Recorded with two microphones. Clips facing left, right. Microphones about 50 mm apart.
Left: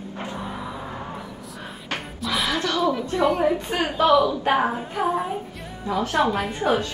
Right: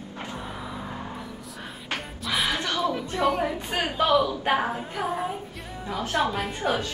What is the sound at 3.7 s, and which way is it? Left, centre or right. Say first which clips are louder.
Speech: left 3 dB; centre.